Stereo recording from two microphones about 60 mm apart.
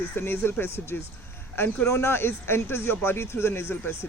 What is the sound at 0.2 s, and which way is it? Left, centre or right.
Speech, left.